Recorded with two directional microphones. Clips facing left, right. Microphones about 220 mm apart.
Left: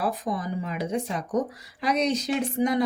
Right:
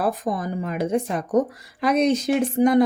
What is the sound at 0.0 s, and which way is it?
Speech, 50° right (ahead or behind).